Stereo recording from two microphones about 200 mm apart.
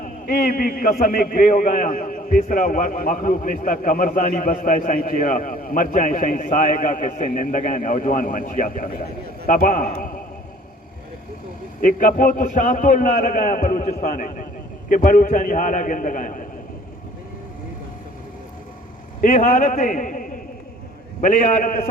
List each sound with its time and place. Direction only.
0.0 s a man's voice: 45° left (ahead or behind)
11.8 s a man's voice: 45° left (ahead or behind)
19.2 s a man's voice: 40° left (ahead or behind)